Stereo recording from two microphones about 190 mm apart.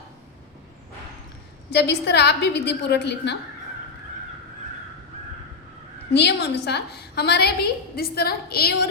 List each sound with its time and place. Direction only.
1.7 s a woman's voice: 60° left (ahead or behind)
6.1 s a woman's voice: 60° left (ahead or behind)